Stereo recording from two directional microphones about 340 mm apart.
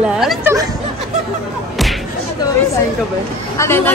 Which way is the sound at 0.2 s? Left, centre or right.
Centre.